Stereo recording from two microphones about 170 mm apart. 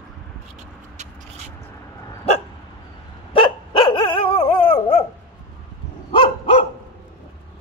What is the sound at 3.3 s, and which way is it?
Dog, 30° left (ahead or behind).